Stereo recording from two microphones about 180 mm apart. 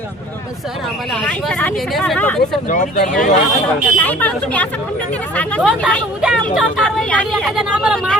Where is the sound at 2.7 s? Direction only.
45° left (ahead or behind).